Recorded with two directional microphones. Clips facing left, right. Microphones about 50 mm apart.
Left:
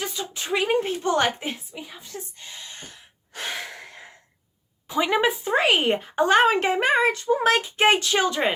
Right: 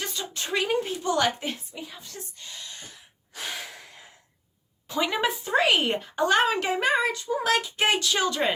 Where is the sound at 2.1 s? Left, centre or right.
Centre.